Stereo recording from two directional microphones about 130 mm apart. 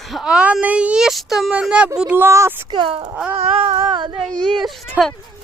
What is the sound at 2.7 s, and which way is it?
Speech, 40° right (ahead or behind).